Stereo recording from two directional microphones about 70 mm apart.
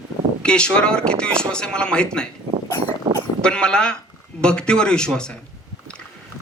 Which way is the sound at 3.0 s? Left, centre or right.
Right.